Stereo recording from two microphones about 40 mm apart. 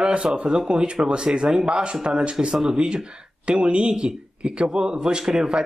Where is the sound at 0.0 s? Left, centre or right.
Right.